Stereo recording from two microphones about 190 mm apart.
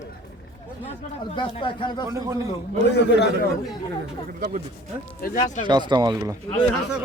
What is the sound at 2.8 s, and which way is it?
Speech, 60° left (ahead or behind).